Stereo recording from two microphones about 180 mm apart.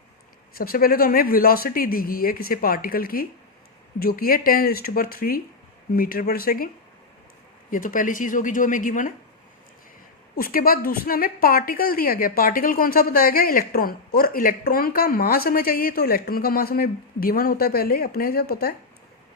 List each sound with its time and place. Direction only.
0.5 s a woman's voice: 55° left (ahead or behind)
7.7 s speech: 50° left (ahead or behind)
10.3 s a woman's voice: 55° left (ahead or behind)